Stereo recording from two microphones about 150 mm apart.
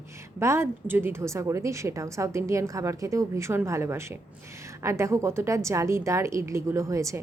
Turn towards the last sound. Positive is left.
turn(degrees=-20)  # may be behind; listen again after turning